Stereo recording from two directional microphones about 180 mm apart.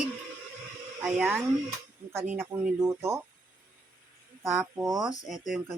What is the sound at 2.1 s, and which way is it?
Speech, 10° right (ahead or behind).